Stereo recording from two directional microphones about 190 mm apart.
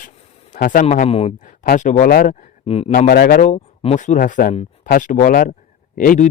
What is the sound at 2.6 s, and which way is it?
Speech, 30° left (ahead or behind).